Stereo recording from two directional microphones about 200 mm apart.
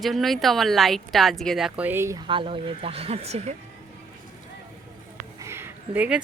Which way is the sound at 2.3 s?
25° right (ahead or behind).